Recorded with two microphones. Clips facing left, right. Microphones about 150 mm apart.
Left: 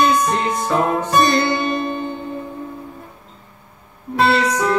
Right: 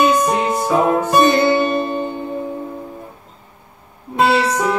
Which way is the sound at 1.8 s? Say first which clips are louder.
Right 2 dB; 40° right (ahead or behind).